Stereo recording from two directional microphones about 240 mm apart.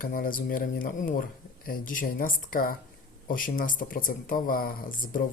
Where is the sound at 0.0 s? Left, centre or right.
Left.